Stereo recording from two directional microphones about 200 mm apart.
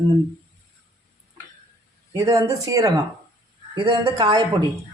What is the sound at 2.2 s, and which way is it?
A woman's voice, 15° right (ahead or behind).